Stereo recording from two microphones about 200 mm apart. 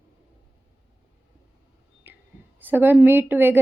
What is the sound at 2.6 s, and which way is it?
A woman's voice, 10° right (ahead or behind).